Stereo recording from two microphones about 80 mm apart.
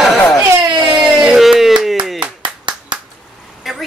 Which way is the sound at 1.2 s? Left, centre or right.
Centre.